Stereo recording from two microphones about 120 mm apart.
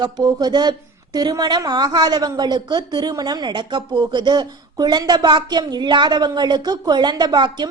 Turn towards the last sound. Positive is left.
turn(degrees=-40)  # may be behind; listen again after turning